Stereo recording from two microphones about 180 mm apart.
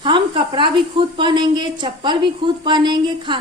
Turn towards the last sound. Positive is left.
turn(degrees=-25)  # may be behind; listen again after turning